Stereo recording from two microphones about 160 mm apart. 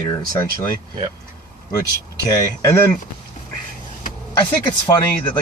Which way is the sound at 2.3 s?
20° left (ahead or behind).